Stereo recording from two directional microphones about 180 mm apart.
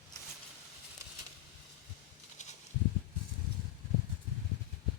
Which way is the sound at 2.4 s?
40° left (ahead or behind).